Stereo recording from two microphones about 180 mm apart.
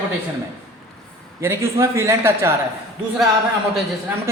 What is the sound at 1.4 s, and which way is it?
A man's voice, 15° right (ahead or behind).